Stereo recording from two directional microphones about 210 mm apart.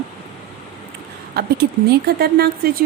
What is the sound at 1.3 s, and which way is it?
A woman's voice, 50° right (ahead or behind).